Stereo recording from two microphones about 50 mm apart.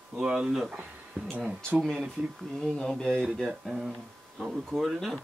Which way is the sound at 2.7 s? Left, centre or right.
Centre.